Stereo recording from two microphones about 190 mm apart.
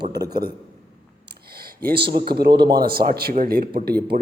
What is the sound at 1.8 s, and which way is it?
A man's voice, 55° right (ahead or behind).